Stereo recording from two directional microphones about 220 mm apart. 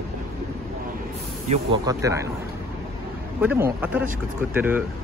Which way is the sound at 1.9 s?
15° right (ahead or behind).